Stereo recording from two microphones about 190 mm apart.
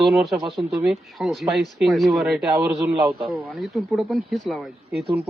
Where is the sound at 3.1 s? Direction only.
25° right (ahead or behind).